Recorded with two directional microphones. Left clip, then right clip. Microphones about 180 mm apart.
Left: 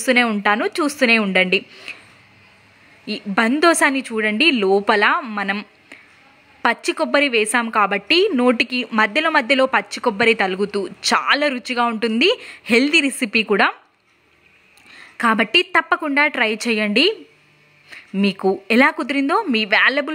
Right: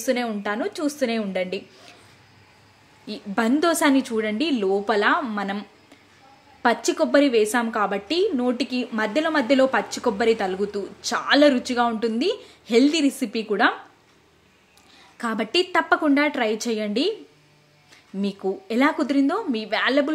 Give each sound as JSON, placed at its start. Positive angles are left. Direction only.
{"t": 0.0, "sound": "a woman's voice", "side_deg": 25}
{"t": 3.1, "sound": "a woman's voice", "side_deg": 20}
{"t": 14.9, "sound": "a woman's voice", "side_deg": 20}
{"t": 18.1, "sound": "a woman's voice", "side_deg": 25}